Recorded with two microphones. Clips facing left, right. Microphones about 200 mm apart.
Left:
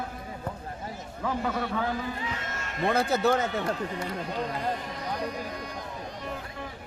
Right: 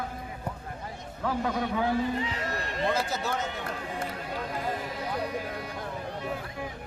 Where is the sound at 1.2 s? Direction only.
Centre (ahead or behind).